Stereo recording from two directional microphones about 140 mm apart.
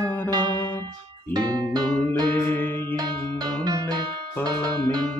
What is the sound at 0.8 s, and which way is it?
Music, 30° right (ahead or behind).